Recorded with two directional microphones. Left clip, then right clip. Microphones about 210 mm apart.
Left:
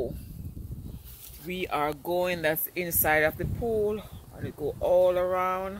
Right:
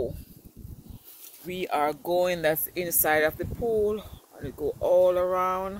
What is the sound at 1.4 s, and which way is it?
Speech, 20° right (ahead or behind).